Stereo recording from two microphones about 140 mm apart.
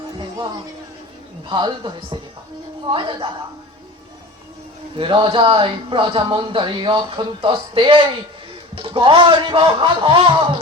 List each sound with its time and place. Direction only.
1.5 s speech: 35° right (ahead or behind)
4.9 s speech: 35° right (ahead or behind)